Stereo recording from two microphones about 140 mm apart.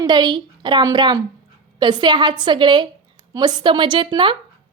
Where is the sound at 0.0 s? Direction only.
30° right (ahead or behind).